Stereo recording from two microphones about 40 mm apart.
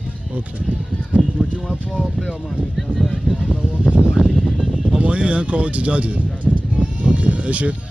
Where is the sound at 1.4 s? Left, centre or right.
Left.